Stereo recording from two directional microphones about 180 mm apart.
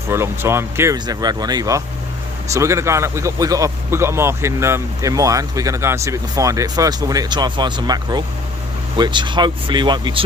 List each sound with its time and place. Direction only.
0.1 s speech: 15° right (ahead or behind)